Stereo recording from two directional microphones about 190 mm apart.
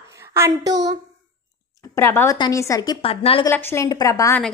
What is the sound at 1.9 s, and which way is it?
A woman's voice, 10° left (ahead or behind).